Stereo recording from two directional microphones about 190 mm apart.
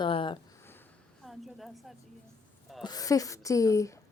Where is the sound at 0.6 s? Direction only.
10° left (ahead or behind).